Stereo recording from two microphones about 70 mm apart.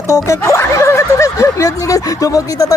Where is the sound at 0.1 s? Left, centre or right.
Left.